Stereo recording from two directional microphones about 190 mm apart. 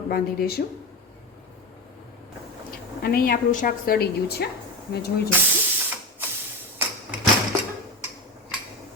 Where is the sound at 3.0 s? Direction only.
55° left (ahead or behind).